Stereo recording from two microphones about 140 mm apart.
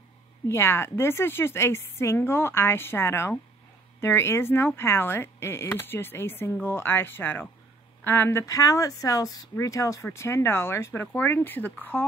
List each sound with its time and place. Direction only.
0.5 s speech: 20° left (ahead or behind)